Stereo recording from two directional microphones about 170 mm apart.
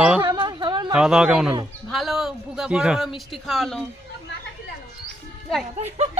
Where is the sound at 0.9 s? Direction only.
5° right (ahead or behind).